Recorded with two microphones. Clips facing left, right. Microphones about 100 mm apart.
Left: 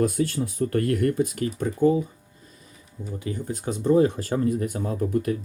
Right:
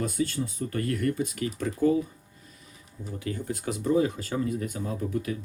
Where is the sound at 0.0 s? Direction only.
55° left (ahead or behind).